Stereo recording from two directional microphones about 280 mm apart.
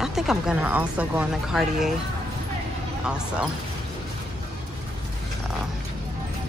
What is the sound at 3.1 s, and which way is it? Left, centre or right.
Speech, centre.